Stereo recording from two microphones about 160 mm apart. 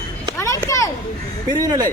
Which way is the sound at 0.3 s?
20° left (ahead or behind).